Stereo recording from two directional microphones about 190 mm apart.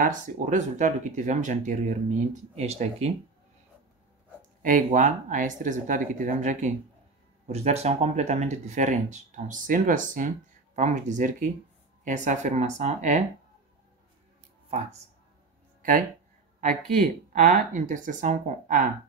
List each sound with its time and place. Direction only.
0.0 s speech: 40° right (ahead or behind)
4.6 s speech: 45° right (ahead or behind)
17.0 s speech: 45° right (ahead or behind)